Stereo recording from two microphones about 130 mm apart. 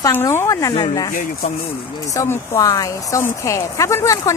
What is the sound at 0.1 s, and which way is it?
Speech, 20° left (ahead or behind).